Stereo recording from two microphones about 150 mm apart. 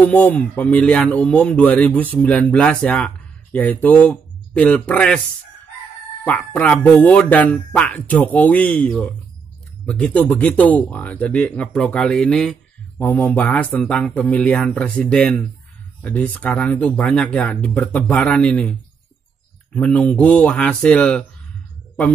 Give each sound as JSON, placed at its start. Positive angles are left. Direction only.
{"t": 0.0, "sound": "speech", "side_deg": 10}
{"t": 6.2, "sound": "speech", "side_deg": 10}